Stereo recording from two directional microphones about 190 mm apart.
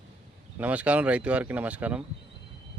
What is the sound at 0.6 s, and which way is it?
Speech, 5° right (ahead or behind).